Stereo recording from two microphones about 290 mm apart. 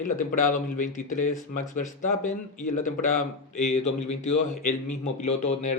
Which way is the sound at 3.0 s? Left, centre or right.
Left.